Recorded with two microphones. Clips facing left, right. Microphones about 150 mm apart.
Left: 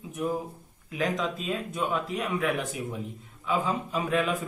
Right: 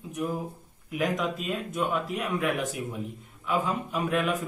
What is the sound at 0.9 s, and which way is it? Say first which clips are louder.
Speech: right 1 dB; 5° right (ahead or behind).